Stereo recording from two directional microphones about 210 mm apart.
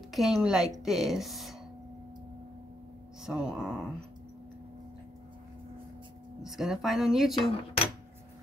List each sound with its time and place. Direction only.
0.1 s speech: centre (ahead or behind)
3.3 s speech: 5° right (ahead or behind)
6.4 s speech: centre (ahead or behind)
7.3 s dishes: 25° left (ahead or behind)